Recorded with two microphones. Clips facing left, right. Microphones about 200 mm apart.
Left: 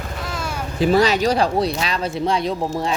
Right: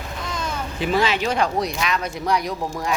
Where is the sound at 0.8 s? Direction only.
40° left (ahead or behind).